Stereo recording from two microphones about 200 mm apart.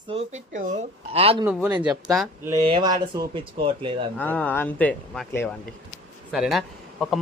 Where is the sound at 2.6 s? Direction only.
25° right (ahead or behind).